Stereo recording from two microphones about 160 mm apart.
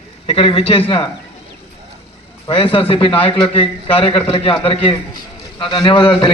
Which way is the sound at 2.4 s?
35° left (ahead or behind).